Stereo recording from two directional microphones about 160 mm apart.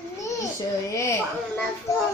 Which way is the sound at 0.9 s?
20° left (ahead or behind).